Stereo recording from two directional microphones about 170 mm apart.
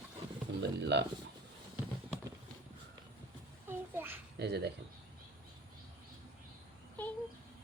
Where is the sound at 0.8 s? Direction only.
90° right.